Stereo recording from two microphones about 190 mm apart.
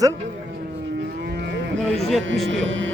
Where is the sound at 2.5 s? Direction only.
90° right.